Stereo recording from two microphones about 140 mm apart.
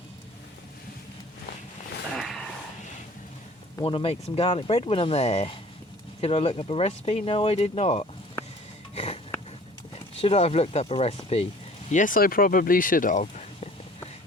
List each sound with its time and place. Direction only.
2.1 s a sound: centre (ahead or behind)
3.8 s speech: 40° left (ahead or behind)
9.9 s speech: 45° left (ahead or behind)
11.9 s speech: 70° left (ahead or behind)